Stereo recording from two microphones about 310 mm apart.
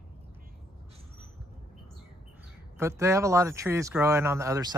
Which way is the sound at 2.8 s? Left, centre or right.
Centre.